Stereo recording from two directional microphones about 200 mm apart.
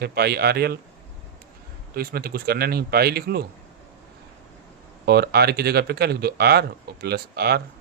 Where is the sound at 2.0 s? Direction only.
50° right (ahead or behind).